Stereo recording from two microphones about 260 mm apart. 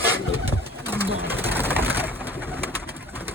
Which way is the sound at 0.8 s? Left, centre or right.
Centre.